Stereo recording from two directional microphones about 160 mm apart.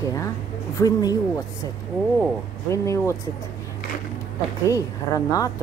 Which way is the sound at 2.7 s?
20° left (ahead or behind).